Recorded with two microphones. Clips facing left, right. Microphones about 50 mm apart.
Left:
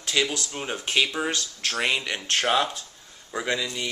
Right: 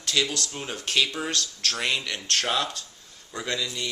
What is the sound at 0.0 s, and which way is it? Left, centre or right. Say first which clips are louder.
Speech: left 1 dB; centre.